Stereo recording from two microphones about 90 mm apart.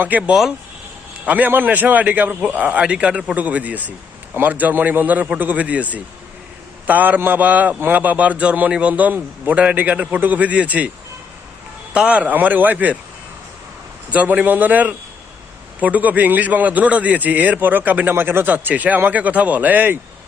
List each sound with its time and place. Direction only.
0.0 s a man's voice: 15° right (ahead or behind)
11.9 s a man's voice: 15° right (ahead or behind)
14.1 s a man's voice: 15° right (ahead or behind)